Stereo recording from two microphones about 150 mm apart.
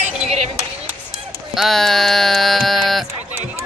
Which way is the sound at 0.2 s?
45° right (ahead or behind).